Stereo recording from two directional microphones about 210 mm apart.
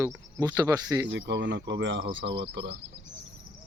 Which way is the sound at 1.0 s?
60° right (ahead or behind).